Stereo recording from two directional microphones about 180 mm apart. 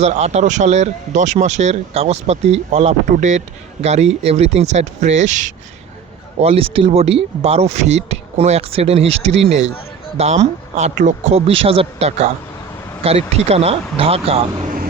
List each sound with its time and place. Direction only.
0.0 s speech: 35° right (ahead or behind)
6.4 s speech: 35° right (ahead or behind)